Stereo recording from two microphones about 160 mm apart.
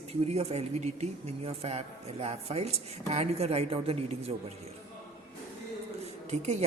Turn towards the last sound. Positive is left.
turn(degrees=-45)  # may be behind; listen again after turning